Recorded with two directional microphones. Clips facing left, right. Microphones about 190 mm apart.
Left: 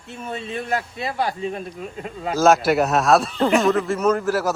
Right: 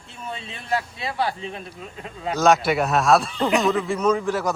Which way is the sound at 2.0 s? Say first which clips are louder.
Left 2 dB; 5° left (ahead or behind).